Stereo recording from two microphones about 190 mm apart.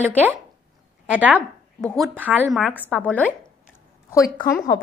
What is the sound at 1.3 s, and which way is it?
Speech, 5° left (ahead or behind).